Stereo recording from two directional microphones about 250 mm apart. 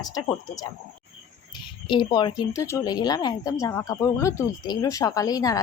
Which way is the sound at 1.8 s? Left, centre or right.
Centre.